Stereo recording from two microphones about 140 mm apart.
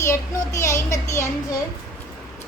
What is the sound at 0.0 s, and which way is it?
A child's voice, 20° left (ahead or behind).